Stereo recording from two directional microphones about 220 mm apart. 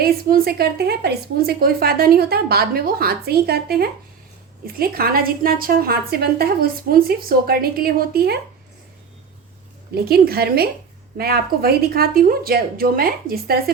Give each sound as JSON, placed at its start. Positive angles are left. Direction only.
{"t": 0.0, "sound": "a woman's voice", "side_deg": -45}
{"t": 9.9, "sound": "a woman's voice", "side_deg": -45}